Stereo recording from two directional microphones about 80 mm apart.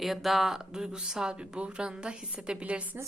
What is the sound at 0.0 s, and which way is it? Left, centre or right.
A woman's voice, centre.